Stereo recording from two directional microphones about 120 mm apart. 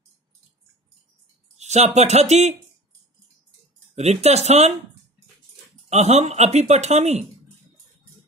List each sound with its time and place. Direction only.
1.6 s speech: 70° right (ahead or behind)
3.9 s speech: 65° right (ahead or behind)
5.9 s speech: 65° right (ahead or behind)